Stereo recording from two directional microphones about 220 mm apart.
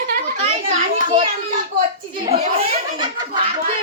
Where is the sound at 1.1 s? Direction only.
35° right (ahead or behind).